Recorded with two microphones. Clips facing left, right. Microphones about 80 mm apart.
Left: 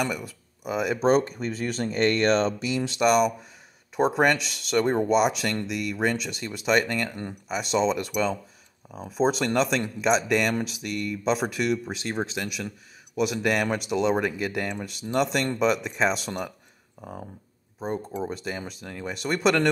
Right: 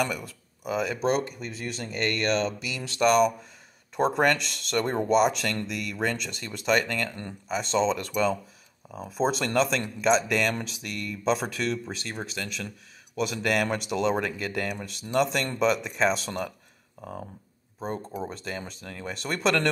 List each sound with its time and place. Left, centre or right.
0.0 s speech: centre
0.9 s speech: left
3.0 s speech: centre
12.4 s speech: centre
17.7 s speech: centre